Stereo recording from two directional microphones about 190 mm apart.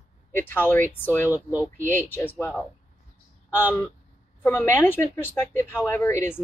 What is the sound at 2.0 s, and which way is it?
Speech, 10° left (ahead or behind).